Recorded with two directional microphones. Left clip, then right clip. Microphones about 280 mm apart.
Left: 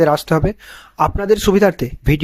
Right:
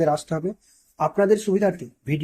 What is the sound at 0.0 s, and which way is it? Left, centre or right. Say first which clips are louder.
Speech: left 8 dB; left.